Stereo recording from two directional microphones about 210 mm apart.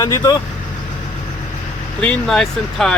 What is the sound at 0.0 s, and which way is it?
Speech, 15° left (ahead or behind).